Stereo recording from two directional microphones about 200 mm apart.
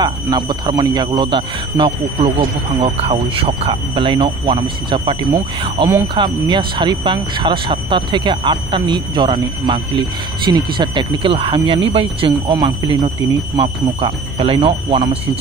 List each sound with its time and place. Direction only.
0.0 s speech: 20° right (ahead or behind)